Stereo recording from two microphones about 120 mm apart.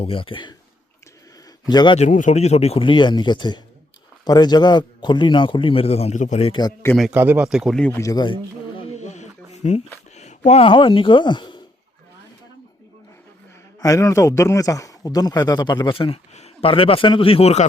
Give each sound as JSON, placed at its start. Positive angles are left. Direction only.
{"t": 0.0, "sound": "a man's voice", "side_deg": 50}
{"t": 1.6, "sound": "speech", "side_deg": 40}
{"t": 2.0, "sound": "a man's voice", "side_deg": 90}
{"t": 7.1, "sound": "speech", "side_deg": -15}
{"t": 7.4, "sound": "speech", "side_deg": -5}
{"t": 7.8, "sound": "speech", "side_deg": 15}
{"t": 8.0, "sound": "a man's voice", "side_deg": 35}
{"t": 9.0, "sound": "a sound", "side_deg": 75}
{"t": 10.6, "sound": "a man's voice", "side_deg": 45}
{"t": 13.8, "sound": "a man's voice", "side_deg": 25}
{"t": 16.0, "sound": "a man's voice", "side_deg": 50}